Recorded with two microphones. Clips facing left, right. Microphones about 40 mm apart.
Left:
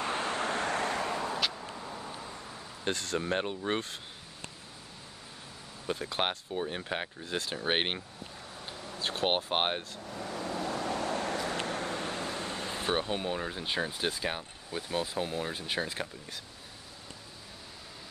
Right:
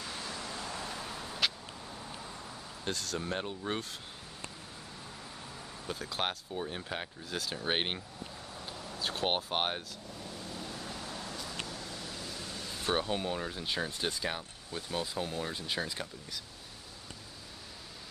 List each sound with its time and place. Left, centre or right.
0.0 s vehicle: left
2.1 s vehicle: centre
2.8 s speech: left
5.9 s speech: left
7.2 s speech: left
7.5 s speech: left
8.7 s vehicle: centre
9.0 s speech: left
10.1 s vehicle: left
12.8 s speech: centre